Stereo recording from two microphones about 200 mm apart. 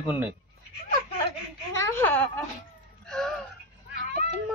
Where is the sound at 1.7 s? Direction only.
15° left (ahead or behind).